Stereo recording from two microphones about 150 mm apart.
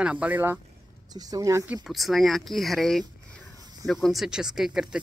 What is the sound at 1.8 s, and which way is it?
Speech, centre (ahead or behind).